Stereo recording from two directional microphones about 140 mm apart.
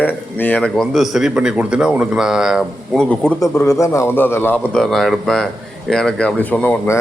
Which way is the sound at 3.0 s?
5° left (ahead or behind).